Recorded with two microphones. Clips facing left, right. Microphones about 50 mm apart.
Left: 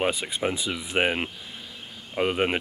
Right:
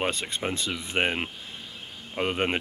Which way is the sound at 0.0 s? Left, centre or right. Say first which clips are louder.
Left 3 dB; centre.